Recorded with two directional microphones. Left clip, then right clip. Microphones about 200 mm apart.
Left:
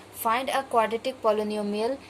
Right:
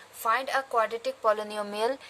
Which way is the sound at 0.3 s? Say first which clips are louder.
Left 1 dB; 30° right (ahead or behind).